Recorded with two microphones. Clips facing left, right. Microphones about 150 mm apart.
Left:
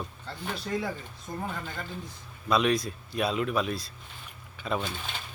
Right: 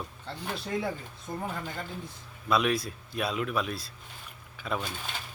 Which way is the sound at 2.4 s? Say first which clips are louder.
Left 2 dB; 5° right (ahead or behind).